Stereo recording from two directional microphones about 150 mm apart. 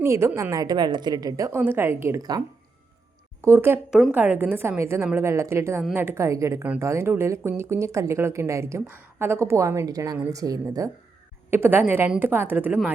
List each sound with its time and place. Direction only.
0.0 s a woman's voice: 15° right (ahead or behind)
3.4 s speech: 15° right (ahead or behind)
3.8 s a woman's voice: 5° right (ahead or behind)